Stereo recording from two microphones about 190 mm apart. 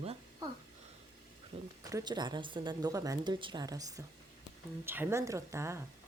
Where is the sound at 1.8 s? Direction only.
20° right (ahead or behind).